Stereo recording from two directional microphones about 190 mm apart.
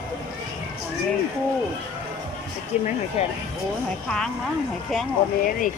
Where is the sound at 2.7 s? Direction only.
35° left (ahead or behind).